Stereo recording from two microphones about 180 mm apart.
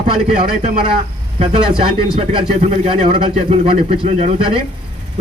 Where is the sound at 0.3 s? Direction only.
30° right (ahead or behind).